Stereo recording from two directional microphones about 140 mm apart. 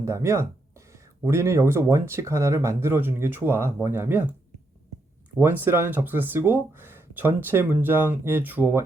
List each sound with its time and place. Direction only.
0.0 s speech: 20° right (ahead or behind)
5.4 s speech: 15° right (ahead or behind)